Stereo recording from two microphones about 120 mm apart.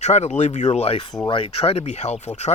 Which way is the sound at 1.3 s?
45° left (ahead or behind).